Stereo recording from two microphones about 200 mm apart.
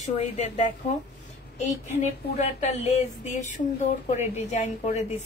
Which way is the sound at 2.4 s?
35° left (ahead or behind).